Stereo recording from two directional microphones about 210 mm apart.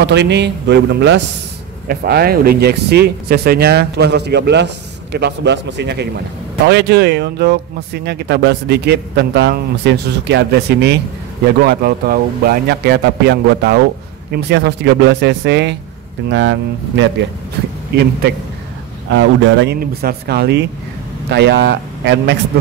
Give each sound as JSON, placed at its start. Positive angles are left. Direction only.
{"t": 0.0, "sound": "a man's voice", "side_deg": -55}
{"t": 19.0, "sound": "a man's voice", "side_deg": -60}